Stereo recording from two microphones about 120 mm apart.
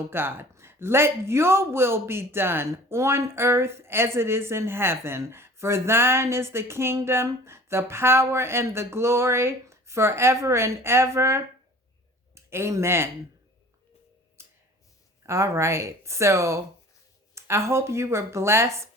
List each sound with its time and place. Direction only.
0.1 s speech: 20° right (ahead or behind)
14.4 s a sound: 20° right (ahead or behind)
15.3 s speech: 25° right (ahead or behind)